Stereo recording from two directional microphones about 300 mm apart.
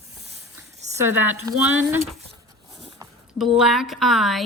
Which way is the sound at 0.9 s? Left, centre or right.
Centre.